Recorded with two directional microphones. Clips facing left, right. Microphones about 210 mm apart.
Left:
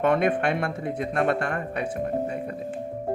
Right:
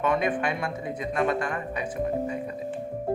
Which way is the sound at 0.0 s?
60° left (ahead or behind).